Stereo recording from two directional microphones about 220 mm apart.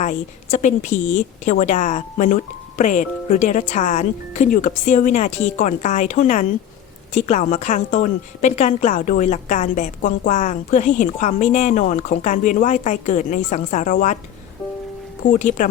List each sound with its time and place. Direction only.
0.0 s a woman's voice: 35° left (ahead or behind)
15.3 s a woman's voice: 35° left (ahead or behind)